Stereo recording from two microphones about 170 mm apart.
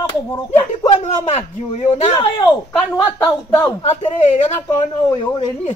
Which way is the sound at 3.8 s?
30° left (ahead or behind).